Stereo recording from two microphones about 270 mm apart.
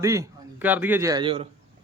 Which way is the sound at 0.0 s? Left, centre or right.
Centre.